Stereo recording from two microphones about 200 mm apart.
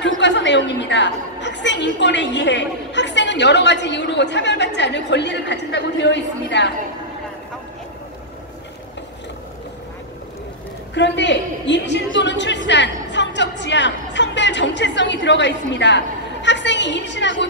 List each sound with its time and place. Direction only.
0.0 s a woman's voice: 60° left (ahead or behind)
11.0 s a woman's voice: 60° left (ahead or behind)